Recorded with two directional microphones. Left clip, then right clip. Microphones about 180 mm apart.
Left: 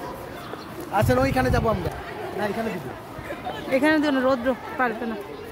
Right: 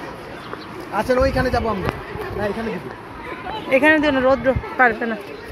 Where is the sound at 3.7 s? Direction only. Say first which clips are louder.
Right 6 dB; 5° left (ahead or behind).